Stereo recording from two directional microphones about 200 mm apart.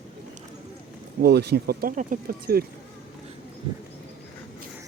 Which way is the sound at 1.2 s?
55° right (ahead or behind).